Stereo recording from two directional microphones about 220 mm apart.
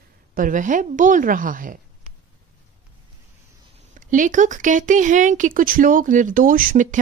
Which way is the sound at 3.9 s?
35° right (ahead or behind).